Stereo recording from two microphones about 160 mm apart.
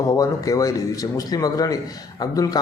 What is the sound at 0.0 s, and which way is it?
Speech, 20° left (ahead or behind).